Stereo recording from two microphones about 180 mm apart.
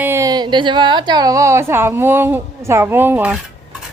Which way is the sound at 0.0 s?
15° right (ahead or behind).